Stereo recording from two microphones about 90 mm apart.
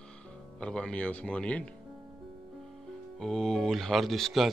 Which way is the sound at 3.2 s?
5° left (ahead or behind).